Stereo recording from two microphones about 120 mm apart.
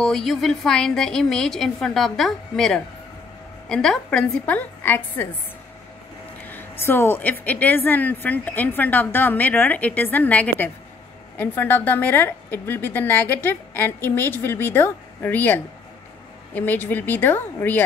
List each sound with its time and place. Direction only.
0.0 s a woman's voice: centre (ahead or behind)
6.5 s a woman's voice: 15° left (ahead or behind)